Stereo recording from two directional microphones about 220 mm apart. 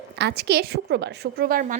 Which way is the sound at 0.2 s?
50° right (ahead or behind).